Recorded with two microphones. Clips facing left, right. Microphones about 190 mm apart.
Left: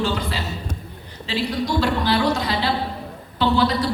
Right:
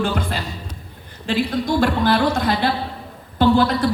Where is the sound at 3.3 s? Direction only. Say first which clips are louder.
Right 3 dB; 50° right (ahead or behind).